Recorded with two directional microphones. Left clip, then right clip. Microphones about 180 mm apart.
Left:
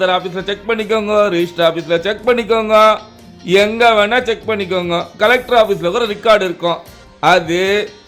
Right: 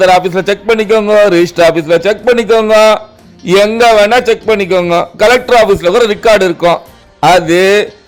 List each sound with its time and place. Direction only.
0.0 s a man's voice: 35° right (ahead or behind)
0.7 s a man's voice: 25° right (ahead or behind)